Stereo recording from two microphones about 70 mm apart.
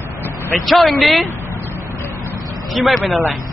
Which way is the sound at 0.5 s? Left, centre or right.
Centre.